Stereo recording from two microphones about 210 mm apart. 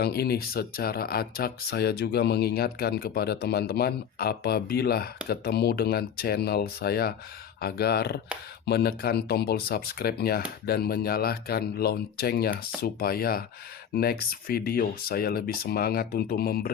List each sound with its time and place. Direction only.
0.0 s speech: 50° left (ahead or behind)